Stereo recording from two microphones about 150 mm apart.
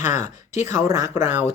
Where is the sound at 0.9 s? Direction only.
20° right (ahead or behind).